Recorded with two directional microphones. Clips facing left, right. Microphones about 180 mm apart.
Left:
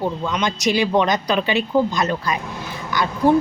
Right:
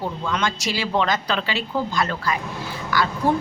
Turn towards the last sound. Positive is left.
turn(degrees=20)  # may be behind; listen again after turning